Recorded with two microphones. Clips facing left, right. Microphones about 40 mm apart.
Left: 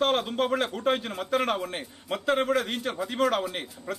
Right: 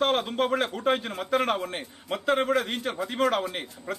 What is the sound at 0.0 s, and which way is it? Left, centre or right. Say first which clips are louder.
A man's voice: even; centre.